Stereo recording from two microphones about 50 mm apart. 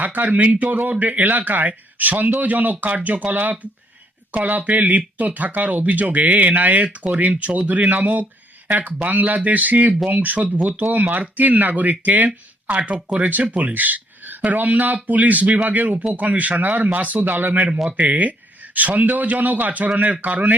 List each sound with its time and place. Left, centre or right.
0.0 s speech: right
17.7 s speech: centre
18.0 s speech: right